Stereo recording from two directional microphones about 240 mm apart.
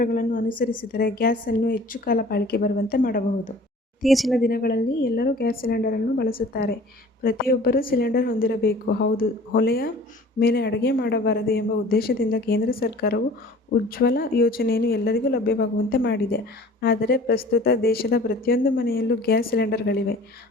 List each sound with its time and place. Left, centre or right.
0.0 s a woman's voice: left
4.0 s speech: centre
4.4 s a woman's voice: left